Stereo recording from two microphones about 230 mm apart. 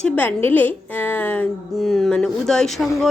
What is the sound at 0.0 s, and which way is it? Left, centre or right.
A woman's voice, centre.